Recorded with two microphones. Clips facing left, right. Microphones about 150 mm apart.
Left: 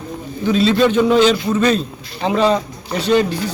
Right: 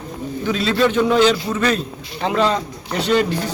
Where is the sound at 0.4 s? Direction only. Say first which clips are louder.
Left 4 dB; 20° left (ahead or behind).